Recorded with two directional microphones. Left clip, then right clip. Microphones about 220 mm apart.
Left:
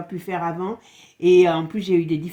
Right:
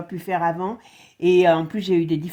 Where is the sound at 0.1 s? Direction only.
35° right (ahead or behind).